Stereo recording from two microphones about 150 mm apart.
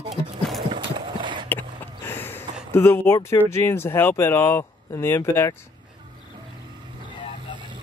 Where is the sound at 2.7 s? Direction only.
15° left (ahead or behind).